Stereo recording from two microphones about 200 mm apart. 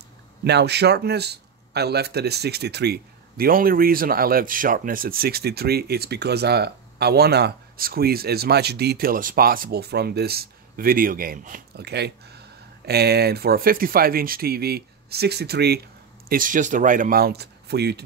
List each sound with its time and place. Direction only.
0.4 s speech: 55° right (ahead or behind)
16.3 s speech: 45° right (ahead or behind)